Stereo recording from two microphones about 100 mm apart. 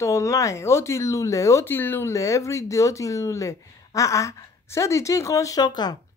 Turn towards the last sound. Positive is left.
turn(degrees=45)  # may be behind; listen again after turning